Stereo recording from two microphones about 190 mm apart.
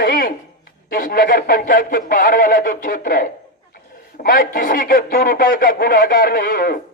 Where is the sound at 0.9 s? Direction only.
50° left (ahead or behind).